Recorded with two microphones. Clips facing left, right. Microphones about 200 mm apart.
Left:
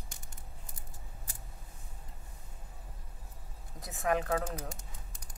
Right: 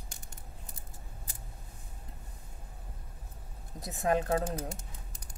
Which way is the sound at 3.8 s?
30° right (ahead or behind).